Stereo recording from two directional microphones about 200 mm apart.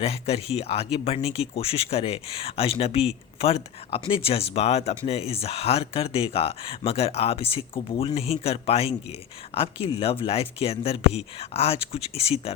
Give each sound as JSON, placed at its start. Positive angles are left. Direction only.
{"t": 0.0, "sound": "speech", "side_deg": 30}